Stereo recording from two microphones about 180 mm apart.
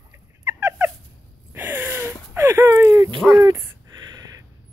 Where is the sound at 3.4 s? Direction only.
15° right (ahead or behind).